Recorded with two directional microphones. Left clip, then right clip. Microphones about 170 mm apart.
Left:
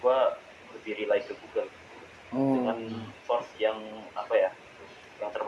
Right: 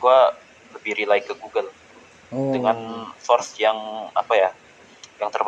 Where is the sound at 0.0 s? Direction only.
75° right (ahead or behind).